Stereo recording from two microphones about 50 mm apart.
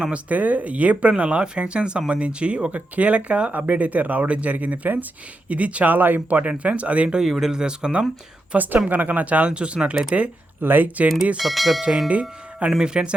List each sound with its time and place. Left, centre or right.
0.0 s speech: right
7.2 s speech: centre
8.5 s speech: right; by 10.2 s centre
10.6 s speech: right
11.3 s speech: centre
11.8 s speech: centre